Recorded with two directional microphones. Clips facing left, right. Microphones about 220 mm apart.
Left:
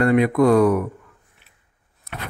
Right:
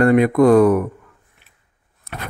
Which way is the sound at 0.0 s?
50° right (ahead or behind).